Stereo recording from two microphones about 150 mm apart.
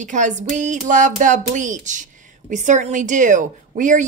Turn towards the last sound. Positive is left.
turn(degrees=-55)  # may be behind; listen again after turning